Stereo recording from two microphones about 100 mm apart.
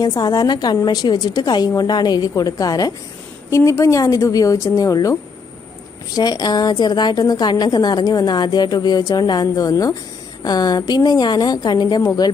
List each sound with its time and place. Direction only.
0.0 s a woman's voice: 40° left (ahead or behind)
6.1 s a woman's voice: 40° left (ahead or behind)